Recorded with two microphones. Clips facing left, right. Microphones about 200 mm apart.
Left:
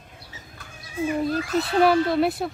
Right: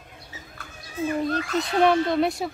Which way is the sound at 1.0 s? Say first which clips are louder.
Left 1 dB; 5° left (ahead or behind).